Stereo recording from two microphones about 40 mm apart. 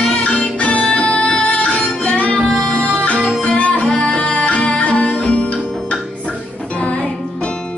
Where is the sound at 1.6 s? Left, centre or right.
Left.